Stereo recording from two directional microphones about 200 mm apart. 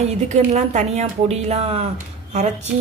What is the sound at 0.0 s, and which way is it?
A woman's voice, 35° right (ahead or behind).